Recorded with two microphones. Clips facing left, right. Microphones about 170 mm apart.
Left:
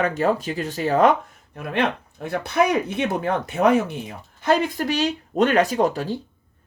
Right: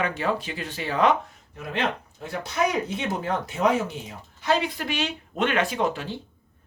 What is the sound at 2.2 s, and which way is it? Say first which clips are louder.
Speech: left 5 dB; 60° left (ahead or behind).